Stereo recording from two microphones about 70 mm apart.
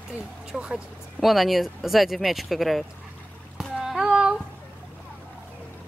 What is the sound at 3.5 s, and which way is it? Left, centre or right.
Rowboat, centre.